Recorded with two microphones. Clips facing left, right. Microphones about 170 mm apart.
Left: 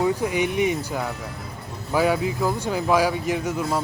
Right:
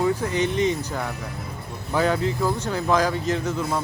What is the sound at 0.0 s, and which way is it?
Speech, 10° left (ahead or behind).